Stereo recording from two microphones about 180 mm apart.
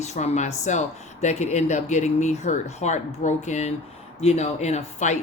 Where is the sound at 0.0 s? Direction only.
40° left (ahead or behind).